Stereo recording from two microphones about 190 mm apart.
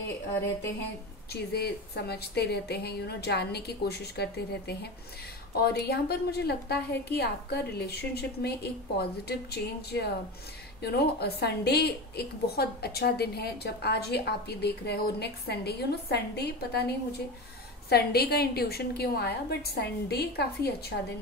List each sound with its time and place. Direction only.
1.3 s a woman's voice: 60° left (ahead or behind)